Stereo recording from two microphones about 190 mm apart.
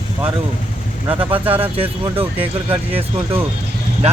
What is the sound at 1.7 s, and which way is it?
Speech, 30° right (ahead or behind).